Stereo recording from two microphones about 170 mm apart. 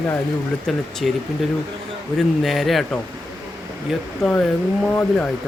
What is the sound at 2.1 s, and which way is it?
Speech, centre (ahead or behind).